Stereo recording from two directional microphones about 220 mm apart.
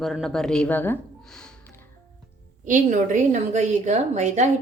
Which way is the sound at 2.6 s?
35° right (ahead or behind).